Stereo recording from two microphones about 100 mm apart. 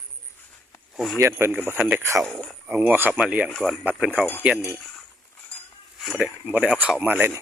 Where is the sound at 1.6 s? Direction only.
20° right (ahead or behind).